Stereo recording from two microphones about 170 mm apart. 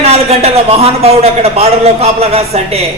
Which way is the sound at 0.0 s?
40° right (ahead or behind).